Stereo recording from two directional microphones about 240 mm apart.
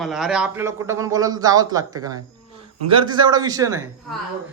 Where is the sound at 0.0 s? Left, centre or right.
Centre.